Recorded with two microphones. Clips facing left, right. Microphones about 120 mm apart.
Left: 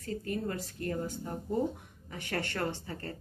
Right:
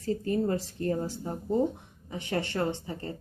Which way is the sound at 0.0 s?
30° right (ahead or behind).